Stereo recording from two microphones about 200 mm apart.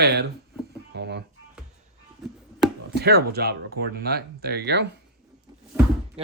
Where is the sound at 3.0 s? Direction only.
55° right (ahead or behind).